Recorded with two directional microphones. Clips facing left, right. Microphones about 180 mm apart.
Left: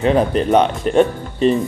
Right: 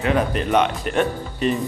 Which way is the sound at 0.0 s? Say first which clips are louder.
Left 5 dB; 35° left (ahead or behind).